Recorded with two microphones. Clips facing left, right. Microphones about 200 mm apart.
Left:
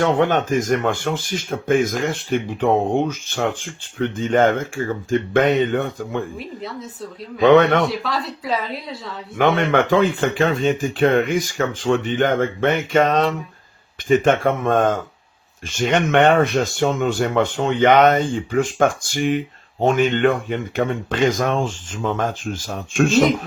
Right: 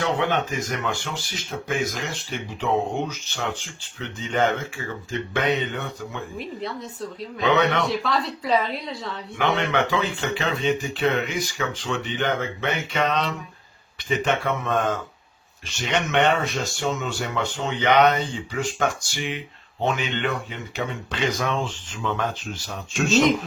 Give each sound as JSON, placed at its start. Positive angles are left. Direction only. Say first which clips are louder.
{"t": 0.0, "sound": "speech", "louder": "left 6 dB", "side_deg": 45}
{"t": 6.3, "sound": "speech", "louder": "left 1 dB", "side_deg": 0}
{"t": 7.4, "sound": "speech", "louder": "left 8 dB", "side_deg": 50}
{"t": 7.9, "sound": "speech", "louder": "even", "side_deg": 0}
{"t": 9.4, "sound": "speech", "louder": "left 6 dB", "side_deg": 50}